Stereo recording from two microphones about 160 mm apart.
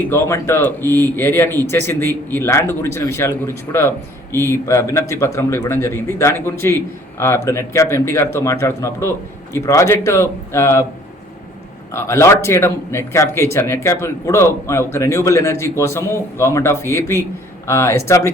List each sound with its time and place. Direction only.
0.1 s a man's voice: 15° left (ahead or behind)
11.9 s a man's voice: 15° left (ahead or behind)